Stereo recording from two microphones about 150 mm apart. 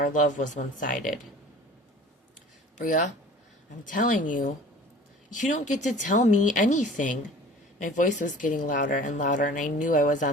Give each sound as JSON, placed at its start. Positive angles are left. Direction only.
{"t": 0.0, "sound": "speech", "side_deg": 60}
{"t": 3.8, "sound": "speech", "side_deg": 60}